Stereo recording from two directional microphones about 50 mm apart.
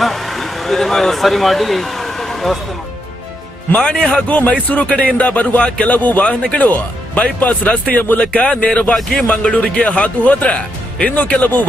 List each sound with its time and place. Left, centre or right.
0.0 s speech: centre
3.8 s a man's voice: centre
4.3 s speech: left